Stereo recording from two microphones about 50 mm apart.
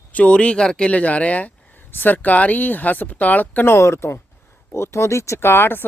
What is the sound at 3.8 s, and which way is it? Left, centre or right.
Speech, left.